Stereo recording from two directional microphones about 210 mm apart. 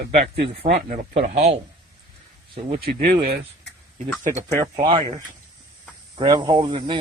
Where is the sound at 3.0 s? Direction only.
30° right (ahead or behind).